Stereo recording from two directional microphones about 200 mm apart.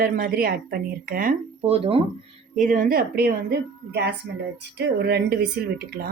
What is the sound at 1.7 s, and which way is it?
Speech, 30° right (ahead or behind).